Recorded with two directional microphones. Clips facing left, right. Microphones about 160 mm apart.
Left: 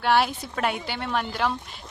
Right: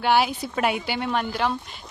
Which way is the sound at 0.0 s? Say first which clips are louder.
Right 1 dB; centre (ahead or behind).